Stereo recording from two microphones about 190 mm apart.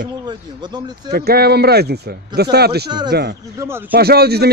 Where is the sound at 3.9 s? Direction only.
55° right (ahead or behind).